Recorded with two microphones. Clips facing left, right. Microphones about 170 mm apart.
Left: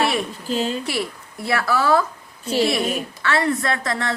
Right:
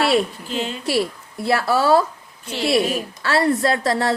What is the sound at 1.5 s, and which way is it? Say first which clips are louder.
Speech: right 2 dB; 30° right (ahead or behind).